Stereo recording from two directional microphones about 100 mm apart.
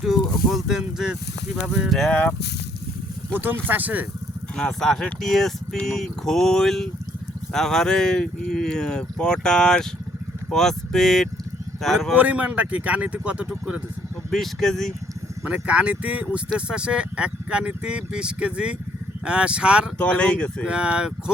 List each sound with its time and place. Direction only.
0.0 s speech: centre (ahead or behind)
2.0 s speech: 5° left (ahead or behind)
3.3 s speech: 20° right (ahead or behind)
4.5 s speech: 5° left (ahead or behind)
12.1 s speech: 15° right (ahead or behind)
14.3 s speech: centre (ahead or behind)
15.4 s speech: 10° right (ahead or behind)
20.0 s speech: 10° left (ahead or behind)
20.7 s speech: 10° right (ahead or behind)